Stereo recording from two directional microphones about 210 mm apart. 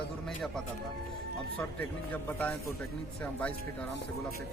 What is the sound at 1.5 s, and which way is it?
Speech, 5° left (ahead or behind).